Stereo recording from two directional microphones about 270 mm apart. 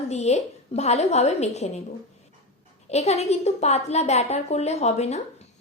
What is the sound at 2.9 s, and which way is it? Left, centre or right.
A woman's voice, left.